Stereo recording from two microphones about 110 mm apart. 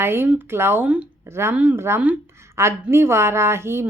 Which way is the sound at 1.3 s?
25° right (ahead or behind).